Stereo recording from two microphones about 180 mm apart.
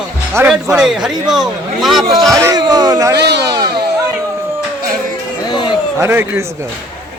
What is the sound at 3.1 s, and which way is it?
Speech, 70° right (ahead or behind).